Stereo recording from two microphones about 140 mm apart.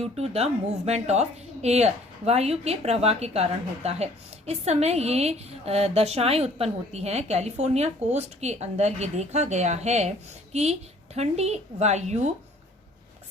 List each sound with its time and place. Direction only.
0.0 s a woman's voice: 45° right (ahead or behind)